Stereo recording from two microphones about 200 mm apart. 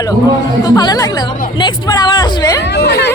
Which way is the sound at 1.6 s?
20° left (ahead or behind).